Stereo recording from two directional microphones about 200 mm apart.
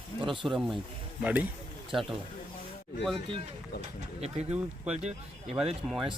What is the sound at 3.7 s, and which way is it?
Speech, 55° left (ahead or behind).